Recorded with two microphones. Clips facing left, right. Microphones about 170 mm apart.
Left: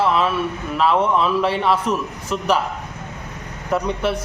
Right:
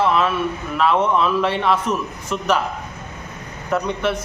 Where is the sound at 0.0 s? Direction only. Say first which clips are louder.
Even; 5° left (ahead or behind).